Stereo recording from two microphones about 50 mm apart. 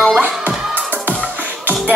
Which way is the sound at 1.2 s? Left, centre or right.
Right.